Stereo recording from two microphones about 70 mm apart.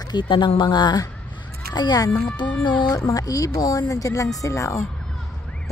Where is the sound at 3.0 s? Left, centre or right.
Left.